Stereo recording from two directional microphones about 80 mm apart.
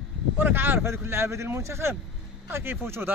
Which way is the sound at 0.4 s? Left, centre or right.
Right.